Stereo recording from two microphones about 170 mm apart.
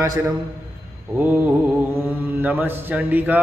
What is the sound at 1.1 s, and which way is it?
Mantra, 10° right (ahead or behind).